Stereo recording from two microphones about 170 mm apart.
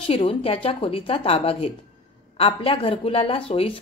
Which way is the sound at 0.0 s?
35° left (ahead or behind).